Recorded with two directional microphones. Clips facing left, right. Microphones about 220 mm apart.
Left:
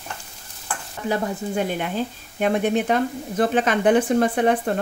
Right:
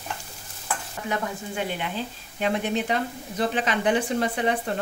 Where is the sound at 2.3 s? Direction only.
50° left (ahead or behind).